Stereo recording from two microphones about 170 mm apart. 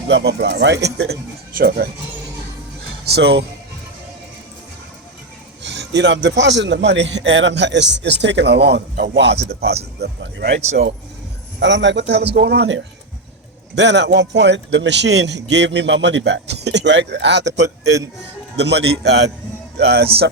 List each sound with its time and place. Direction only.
0.1 s speech: 75° right (ahead or behind)
3.0 s speech: 75° right (ahead or behind)
5.6 s music: 90° right
6.2 s a man's voice: 90° right
9.5 s speech: 70° right (ahead or behind)
10.0 s speech: 85° right
11.6 s a man's voice: 90° right
17.8 s a man's voice: 20° right (ahead or behind)
18.5 s a man's voice: 85° right
19.8 s speech: 70° right (ahead or behind)